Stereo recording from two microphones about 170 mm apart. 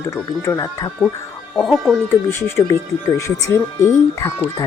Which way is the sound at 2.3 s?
20° left (ahead or behind).